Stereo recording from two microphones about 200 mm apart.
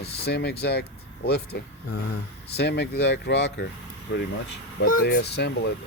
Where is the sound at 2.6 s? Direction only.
55° left (ahead or behind).